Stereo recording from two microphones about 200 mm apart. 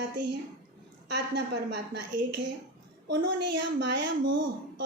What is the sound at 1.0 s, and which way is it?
A woman's voice, 60° right (ahead or behind).